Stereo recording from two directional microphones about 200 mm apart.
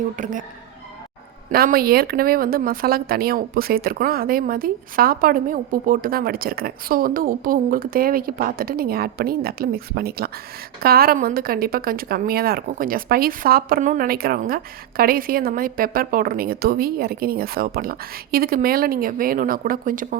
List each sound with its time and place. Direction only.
0.2 s speech: 40° right (ahead or behind)
1.5 s speech: 45° right (ahead or behind)